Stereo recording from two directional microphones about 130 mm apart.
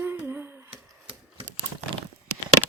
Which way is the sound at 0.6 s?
45° right (ahead or behind).